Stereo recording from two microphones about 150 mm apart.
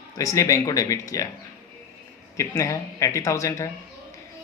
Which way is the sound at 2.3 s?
20° left (ahead or behind).